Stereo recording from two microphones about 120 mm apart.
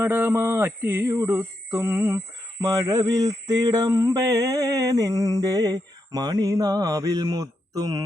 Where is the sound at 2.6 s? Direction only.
30° right (ahead or behind).